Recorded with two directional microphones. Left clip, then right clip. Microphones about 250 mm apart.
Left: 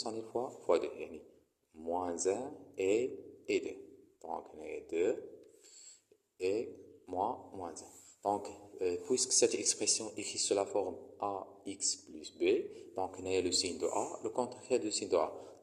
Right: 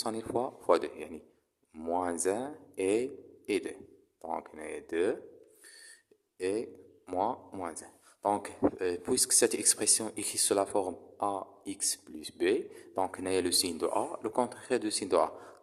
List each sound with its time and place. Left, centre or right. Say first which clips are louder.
0.0 s speech: right 5 dB; right
6.4 s speech: right 2 dB; right